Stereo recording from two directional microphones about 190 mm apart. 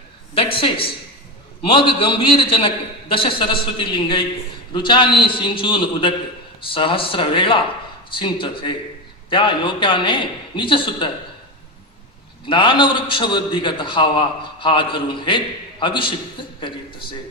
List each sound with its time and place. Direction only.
0.3 s a man's voice: 30° left (ahead or behind)
12.5 s a man's voice: 25° left (ahead or behind)